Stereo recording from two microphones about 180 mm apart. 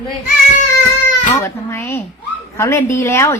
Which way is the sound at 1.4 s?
15° left (ahead or behind).